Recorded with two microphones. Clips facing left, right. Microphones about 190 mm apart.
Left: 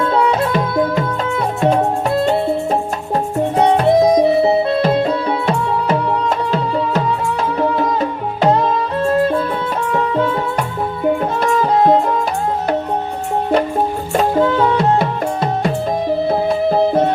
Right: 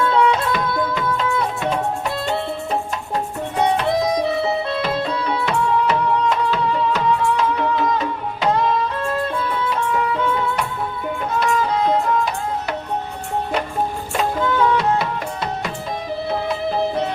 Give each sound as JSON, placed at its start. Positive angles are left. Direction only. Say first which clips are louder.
{"t": 0.0, "sound": "music", "louder": "left 2 dB", "side_deg": 35}
{"t": 3.6, "sound": "music", "louder": "left 6 dB", "side_deg": 45}
{"t": 9.9, "sound": "music", "louder": "left 8 dB", "side_deg": 40}
{"t": 11.3, "sound": "music", "louder": "left 5 dB", "side_deg": 45}
{"t": 14.2, "sound": "music", "louder": "left 5 dB", "side_deg": 35}
{"t": 16.3, "sound": "music", "louder": "left 5 dB", "side_deg": 45}